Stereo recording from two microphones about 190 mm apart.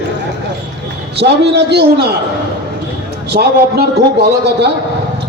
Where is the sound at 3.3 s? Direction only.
55° right (ahead or behind).